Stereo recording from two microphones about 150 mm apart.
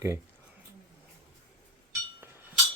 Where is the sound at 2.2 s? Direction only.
15° right (ahead or behind).